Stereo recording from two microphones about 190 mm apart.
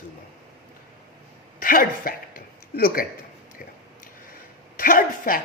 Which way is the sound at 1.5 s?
45° left (ahead or behind).